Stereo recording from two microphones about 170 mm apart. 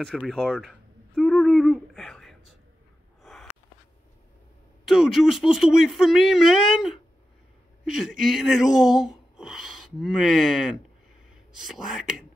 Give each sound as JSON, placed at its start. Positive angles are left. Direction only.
{"t": 0.0, "sound": "a sound", "side_deg": 0}
{"t": 3.2, "sound": "gasp", "side_deg": 0}
{"t": 4.8, "sound": "speech", "side_deg": 0}